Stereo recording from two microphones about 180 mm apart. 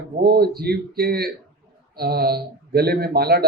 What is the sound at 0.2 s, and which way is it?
Speech, 60° right (ahead or behind).